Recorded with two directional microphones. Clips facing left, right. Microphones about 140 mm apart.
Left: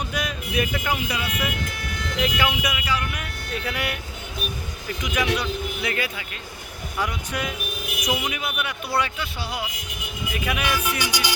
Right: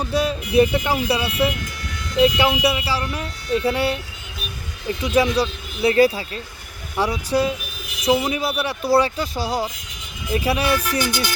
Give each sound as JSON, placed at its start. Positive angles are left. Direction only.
{"t": 0.1, "sound": "speech", "side_deg": -30}
{"t": 5.0, "sound": "speech", "side_deg": -30}
{"t": 10.8, "sound": "speech", "side_deg": 10}